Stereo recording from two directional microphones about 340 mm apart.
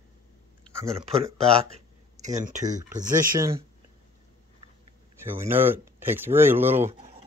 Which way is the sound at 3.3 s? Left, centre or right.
Centre.